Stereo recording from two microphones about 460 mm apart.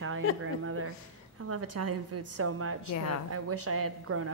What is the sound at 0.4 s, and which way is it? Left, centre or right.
A woman's voice, right.